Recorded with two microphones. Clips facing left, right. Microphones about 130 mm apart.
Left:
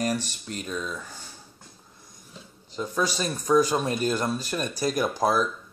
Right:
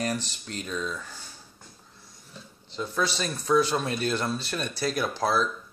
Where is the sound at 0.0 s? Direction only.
10° left (ahead or behind).